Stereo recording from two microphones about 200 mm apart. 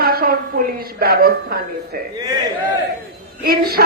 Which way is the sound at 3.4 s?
50° right (ahead or behind).